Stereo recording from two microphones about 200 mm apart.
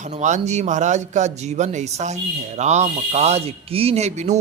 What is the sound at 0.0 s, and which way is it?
Speech, 35° right (ahead or behind).